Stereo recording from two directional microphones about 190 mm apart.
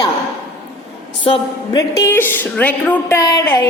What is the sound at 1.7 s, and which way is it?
A woman's voice, 15° left (ahead or behind).